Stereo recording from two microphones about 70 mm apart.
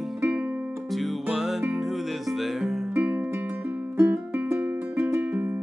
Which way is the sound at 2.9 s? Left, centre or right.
Right.